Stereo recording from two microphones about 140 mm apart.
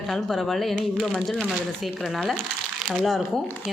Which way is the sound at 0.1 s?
Centre (ahead or behind).